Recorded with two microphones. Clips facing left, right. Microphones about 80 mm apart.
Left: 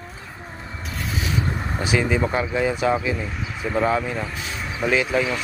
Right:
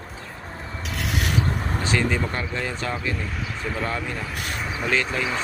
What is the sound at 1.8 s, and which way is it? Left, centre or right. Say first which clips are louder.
Speech: left 3 dB; centre.